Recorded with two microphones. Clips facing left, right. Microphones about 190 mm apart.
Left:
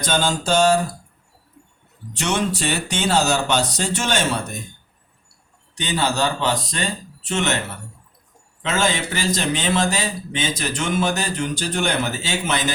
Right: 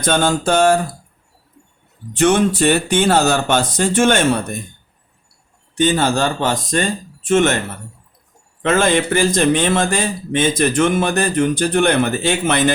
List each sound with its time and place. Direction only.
0.0 s speech: 55° right (ahead or behind)
2.1 s speech: 50° right (ahead or behind)
5.7 s speech: 50° right (ahead or behind)
8.6 s speech: 55° right (ahead or behind)